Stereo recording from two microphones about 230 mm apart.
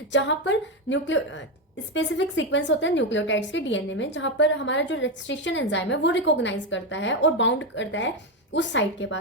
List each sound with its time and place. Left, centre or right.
0.1 s a woman's voice: left